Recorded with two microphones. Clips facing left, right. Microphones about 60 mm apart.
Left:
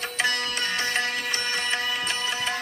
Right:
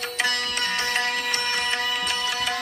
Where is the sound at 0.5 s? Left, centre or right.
Right.